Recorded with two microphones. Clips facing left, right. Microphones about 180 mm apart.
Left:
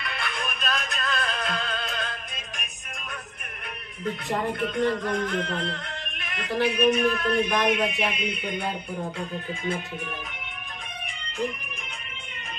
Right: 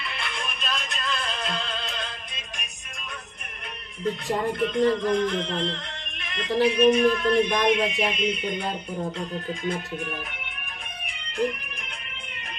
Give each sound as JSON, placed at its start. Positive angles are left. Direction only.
{"t": 0.1, "sound": "music", "side_deg": 0}
{"t": 4.6, "sound": "speech", "side_deg": 5}
{"t": 9.2, "sound": "music", "side_deg": 5}